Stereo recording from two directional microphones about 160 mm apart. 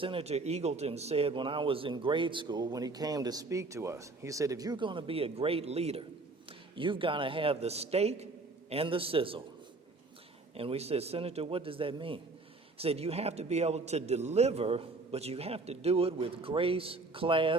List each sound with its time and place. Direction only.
0.0 s speech: 35° right (ahead or behind)
10.6 s speech: 40° right (ahead or behind)